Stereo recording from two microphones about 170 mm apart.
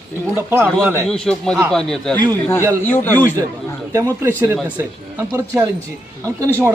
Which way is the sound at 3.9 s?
15° right (ahead or behind).